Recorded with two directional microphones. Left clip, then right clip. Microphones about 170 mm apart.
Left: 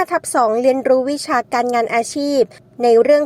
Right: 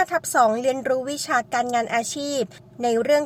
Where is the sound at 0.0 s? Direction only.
30° left (ahead or behind).